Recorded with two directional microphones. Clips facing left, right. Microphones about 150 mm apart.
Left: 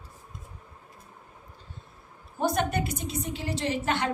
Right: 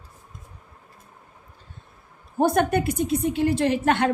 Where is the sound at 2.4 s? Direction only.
55° right (ahead or behind).